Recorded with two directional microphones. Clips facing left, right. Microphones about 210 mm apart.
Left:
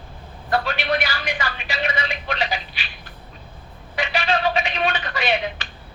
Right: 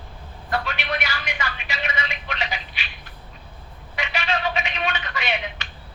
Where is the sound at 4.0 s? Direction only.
35° left (ahead or behind).